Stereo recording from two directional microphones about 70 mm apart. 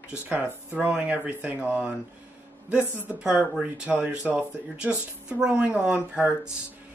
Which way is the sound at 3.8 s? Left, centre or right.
Right.